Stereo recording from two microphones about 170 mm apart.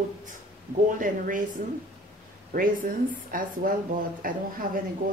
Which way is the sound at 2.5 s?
55° right (ahead or behind).